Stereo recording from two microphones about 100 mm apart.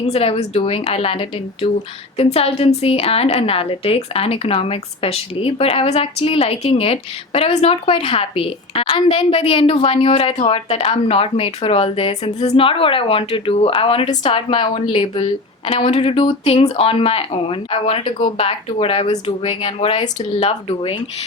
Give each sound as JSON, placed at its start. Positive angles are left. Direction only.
{"t": 0.1, "sound": "a woman's voice", "side_deg": 85}
{"t": 2.1, "sound": "a woman's voice", "side_deg": 80}
{"t": 14.3, "sound": "a woman's voice", "side_deg": 60}